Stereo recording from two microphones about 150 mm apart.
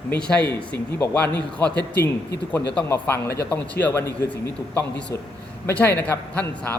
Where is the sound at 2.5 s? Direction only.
10° left (ahead or behind).